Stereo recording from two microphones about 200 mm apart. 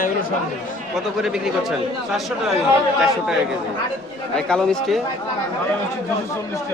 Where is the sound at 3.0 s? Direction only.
Centre (ahead or behind).